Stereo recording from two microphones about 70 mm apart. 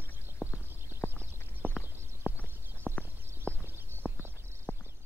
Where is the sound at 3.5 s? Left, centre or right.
Centre.